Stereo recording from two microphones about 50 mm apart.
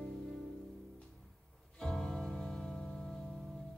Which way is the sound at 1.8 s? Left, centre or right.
Centre.